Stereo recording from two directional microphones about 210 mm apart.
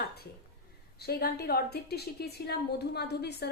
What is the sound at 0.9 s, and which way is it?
A woman's voice, 50° left (ahead or behind).